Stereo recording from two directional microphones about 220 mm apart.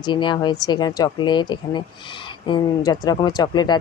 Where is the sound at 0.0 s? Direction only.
20° left (ahead or behind).